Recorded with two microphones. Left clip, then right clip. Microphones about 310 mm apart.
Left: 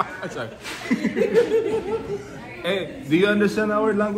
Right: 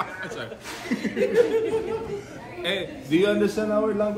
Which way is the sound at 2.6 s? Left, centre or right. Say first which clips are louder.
Left 3 dB; centre.